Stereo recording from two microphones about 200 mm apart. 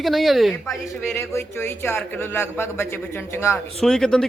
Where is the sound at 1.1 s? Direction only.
15° left (ahead or behind).